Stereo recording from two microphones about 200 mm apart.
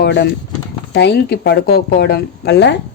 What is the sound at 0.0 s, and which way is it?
A woman's voice, 55° left (ahead or behind).